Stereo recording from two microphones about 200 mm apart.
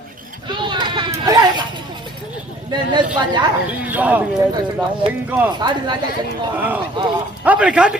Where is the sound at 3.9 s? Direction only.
10° right (ahead or behind).